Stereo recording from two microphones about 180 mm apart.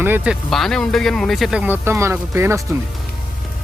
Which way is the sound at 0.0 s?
10° right (ahead or behind).